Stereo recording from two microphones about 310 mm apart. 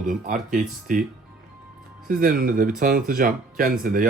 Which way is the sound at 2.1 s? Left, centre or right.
Right.